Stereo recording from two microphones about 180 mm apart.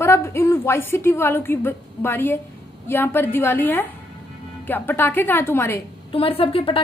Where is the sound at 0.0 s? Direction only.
15° left (ahead or behind).